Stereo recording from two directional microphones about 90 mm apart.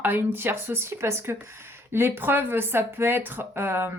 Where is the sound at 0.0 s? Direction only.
20° right (ahead or behind).